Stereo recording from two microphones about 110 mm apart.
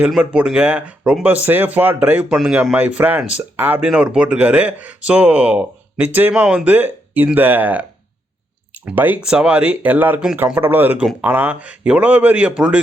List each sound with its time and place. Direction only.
0.2 s speech: 10° right (ahead or behind)